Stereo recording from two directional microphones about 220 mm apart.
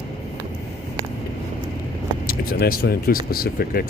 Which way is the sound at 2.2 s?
40° left (ahead or behind).